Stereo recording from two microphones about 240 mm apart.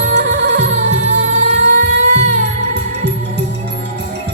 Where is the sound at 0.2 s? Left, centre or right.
Right.